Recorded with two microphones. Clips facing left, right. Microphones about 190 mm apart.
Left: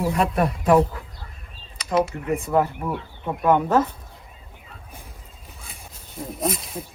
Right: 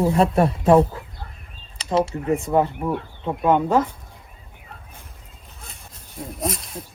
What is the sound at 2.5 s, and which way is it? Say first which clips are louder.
Speech: even; 20° right (ahead or behind).